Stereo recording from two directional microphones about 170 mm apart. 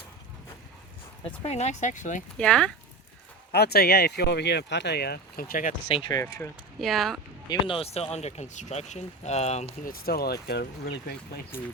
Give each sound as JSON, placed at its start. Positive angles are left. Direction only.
{"t": 1.2, "sound": "speech", "side_deg": 35}
{"t": 2.4, "sound": "speech", "side_deg": 5}
{"t": 3.5, "sound": "speech", "side_deg": 70}
{"t": 6.1, "sound": "speech", "side_deg": 20}
{"t": 6.7, "sound": "speech", "side_deg": 0}
{"t": 7.6, "sound": "speech", "side_deg": 30}
{"t": 9.8, "sound": "speech", "side_deg": 60}